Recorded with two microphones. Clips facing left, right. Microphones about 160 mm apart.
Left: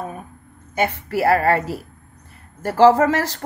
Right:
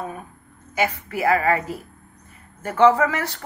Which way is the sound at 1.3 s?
75° left (ahead or behind).